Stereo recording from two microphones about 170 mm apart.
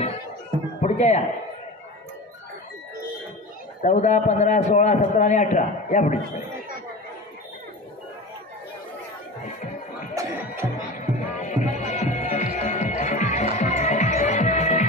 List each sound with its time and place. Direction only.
0.7 s music: 45° left (ahead or behind)
3.8 s a man's voice: 45° left (ahead or behind)
10.1 s a sound: 15° right (ahead or behind)
11.0 s music: 40° left (ahead or behind)